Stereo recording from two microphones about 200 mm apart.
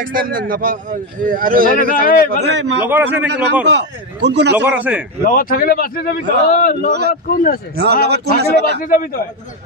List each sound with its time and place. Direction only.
0.0 s a man's voice: 45° right (ahead or behind)
1.8 s speech: 45° left (ahead or behind)
2.4 s a man's voice: 60° right (ahead or behind)
2.8 s a man's voice: 10° right (ahead or behind)
3.6 s a man's voice: 60° right (ahead or behind)
4.6 s a man's voice: 10° right (ahead or behind)
5.2 s speech: 45° left (ahead or behind)
6.9 s a man's voice: 55° right (ahead or behind)
7.2 s speech: 45° left (ahead or behind)
7.7 s a man's voice: 55° right (ahead or behind)
8.7 s speech: 45° left (ahead or behind)